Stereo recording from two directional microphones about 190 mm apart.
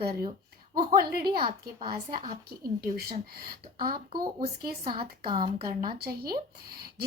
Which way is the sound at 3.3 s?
50° right (ahead or behind).